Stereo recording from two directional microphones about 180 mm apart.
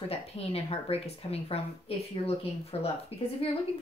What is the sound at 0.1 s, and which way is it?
Speech, 35° left (ahead or behind).